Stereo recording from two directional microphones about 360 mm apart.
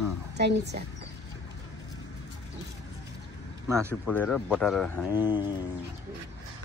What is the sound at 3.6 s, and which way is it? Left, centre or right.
Speech, centre.